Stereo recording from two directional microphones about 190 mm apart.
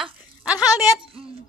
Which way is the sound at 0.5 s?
20° left (ahead or behind).